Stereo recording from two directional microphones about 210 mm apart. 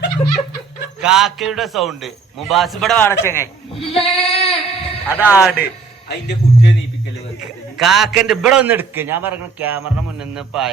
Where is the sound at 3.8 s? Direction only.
30° left (ahead or behind).